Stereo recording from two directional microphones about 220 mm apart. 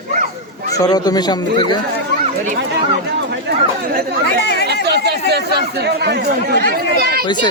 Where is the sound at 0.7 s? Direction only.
15° left (ahead or behind).